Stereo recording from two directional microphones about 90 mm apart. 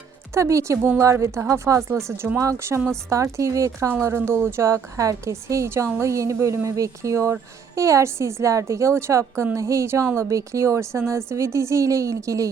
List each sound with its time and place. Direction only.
0.3 s a woman's voice: 35° right (ahead or behind)